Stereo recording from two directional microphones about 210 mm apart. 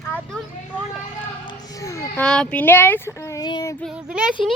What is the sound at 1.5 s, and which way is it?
Children playing, 15° left (ahead or behind).